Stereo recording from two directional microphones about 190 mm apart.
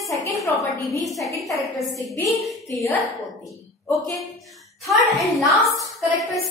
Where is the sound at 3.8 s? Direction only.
Centre (ahead or behind).